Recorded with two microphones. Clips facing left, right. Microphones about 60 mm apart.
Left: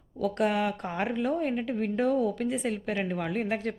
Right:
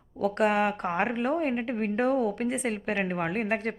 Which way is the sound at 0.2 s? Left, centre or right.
Right.